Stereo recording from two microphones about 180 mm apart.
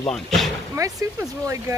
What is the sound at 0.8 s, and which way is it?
Speech, 20° right (ahead or behind).